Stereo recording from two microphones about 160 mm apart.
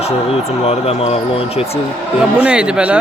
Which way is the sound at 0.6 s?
40° left (ahead or behind).